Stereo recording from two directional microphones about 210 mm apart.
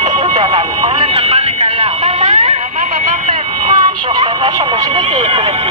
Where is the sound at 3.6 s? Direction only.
20° right (ahead or behind).